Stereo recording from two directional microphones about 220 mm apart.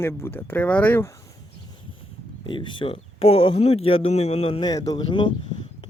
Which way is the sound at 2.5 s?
20° left (ahead or behind).